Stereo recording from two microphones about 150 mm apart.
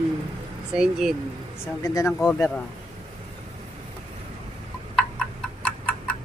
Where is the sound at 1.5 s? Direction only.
20° left (ahead or behind).